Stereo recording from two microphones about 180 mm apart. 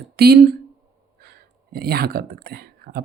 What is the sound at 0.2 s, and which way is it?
Speech, 60° right (ahead or behind).